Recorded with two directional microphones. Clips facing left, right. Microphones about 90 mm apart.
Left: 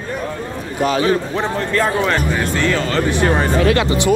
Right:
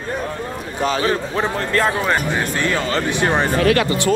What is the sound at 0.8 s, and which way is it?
Speech, 35° right (ahead or behind).